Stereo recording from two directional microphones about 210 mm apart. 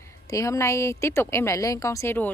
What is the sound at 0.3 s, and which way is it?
A woman's voice, 15° left (ahead or behind).